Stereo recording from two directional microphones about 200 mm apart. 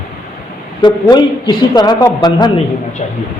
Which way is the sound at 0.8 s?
20° left (ahead or behind).